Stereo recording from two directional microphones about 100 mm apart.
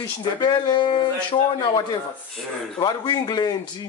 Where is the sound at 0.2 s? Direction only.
50° left (ahead or behind).